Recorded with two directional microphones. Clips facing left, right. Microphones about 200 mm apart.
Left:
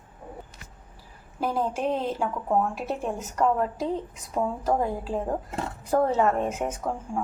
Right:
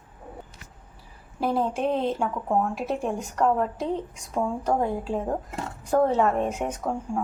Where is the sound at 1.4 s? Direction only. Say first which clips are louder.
Right 2 dB; centre (ahead or behind).